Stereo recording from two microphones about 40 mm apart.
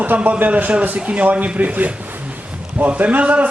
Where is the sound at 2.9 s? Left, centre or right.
Right.